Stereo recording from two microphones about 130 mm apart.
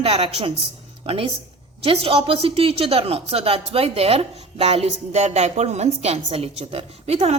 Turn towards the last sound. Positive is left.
turn(degrees=-50)  # may be behind; listen again after turning